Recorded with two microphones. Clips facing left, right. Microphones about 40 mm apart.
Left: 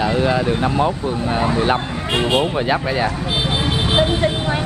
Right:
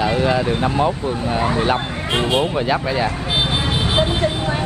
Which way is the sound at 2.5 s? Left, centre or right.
Centre.